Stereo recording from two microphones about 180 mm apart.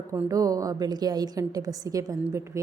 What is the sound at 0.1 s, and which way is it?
A woman's voice, 15° right (ahead or behind).